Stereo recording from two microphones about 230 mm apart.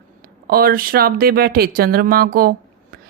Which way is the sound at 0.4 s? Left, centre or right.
Right.